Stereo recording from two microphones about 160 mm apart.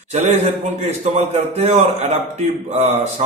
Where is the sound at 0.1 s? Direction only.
45° right (ahead or behind).